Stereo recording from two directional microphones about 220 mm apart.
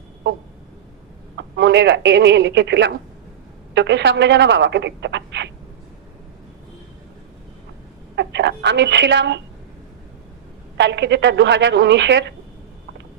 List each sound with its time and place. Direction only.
1.4 s speech: 55° right (ahead or behind)
8.1 s a woman's voice: 50° right (ahead or behind)
10.8 s speech: 55° right (ahead or behind)